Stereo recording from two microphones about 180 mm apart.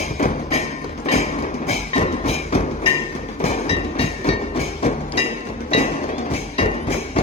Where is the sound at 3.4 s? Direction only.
35° left (ahead or behind).